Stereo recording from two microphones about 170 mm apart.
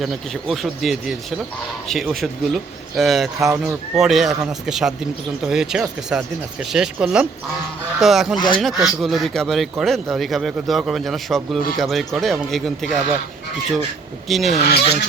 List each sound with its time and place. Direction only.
0.0 s speech: centre (ahead or behind)
8.4 s speech: 30° left (ahead or behind)
8.6 s speech: centre (ahead or behind)
14.3 s speech: centre (ahead or behind)
14.6 s speech: 70° left (ahead or behind)